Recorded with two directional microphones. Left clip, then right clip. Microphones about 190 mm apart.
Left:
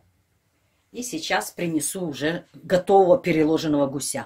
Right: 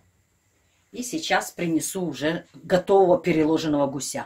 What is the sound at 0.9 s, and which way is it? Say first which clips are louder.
Speech: right 1 dB; 20° left (ahead or behind).